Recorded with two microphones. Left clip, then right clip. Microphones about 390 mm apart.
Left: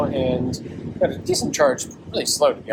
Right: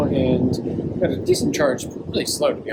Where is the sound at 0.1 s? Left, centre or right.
Centre.